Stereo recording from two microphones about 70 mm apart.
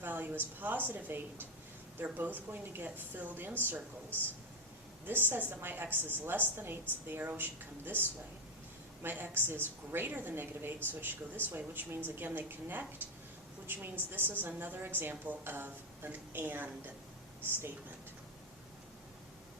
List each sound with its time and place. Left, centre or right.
0.0 s a woman's voice: right
9.0 s a woman's voice: right